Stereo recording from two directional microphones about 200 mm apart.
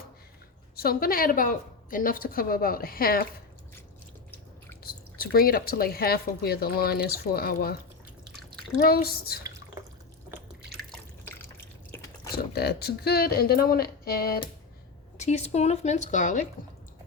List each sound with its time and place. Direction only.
0.8 s speech: 50° left (ahead or behind)
4.8 s speech: 50° left (ahead or behind)
8.8 s speech: 50° left (ahead or behind)
10.8 s drip: 5° left (ahead or behind)
12.5 s speech: 55° left (ahead or behind)
15.2 s speech: 35° left (ahead or behind)